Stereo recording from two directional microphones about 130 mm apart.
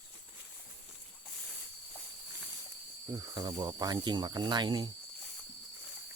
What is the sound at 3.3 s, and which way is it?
Speech, 35° right (ahead or behind).